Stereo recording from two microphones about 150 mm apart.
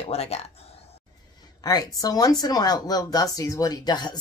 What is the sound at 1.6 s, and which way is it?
Speech, 25° left (ahead or behind).